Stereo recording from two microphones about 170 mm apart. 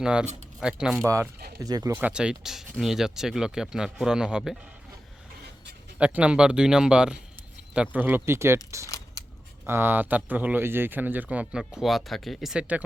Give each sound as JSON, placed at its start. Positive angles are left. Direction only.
{"t": 0.0, "sound": "speech", "side_deg": -5}
{"t": 1.0, "sound": "speech", "side_deg": -15}
{"t": 2.0, "sound": "speech", "side_deg": -5}
{"t": 6.0, "sound": "speech", "side_deg": -10}
{"t": 9.2, "sound": "camera", "side_deg": 20}
{"t": 9.6, "sound": "speech", "side_deg": -15}